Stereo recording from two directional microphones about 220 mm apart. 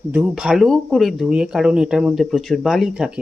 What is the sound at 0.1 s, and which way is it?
Speech, 10° right (ahead or behind).